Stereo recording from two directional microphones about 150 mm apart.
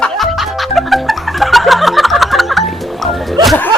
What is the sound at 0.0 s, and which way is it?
Music, centre (ahead or behind).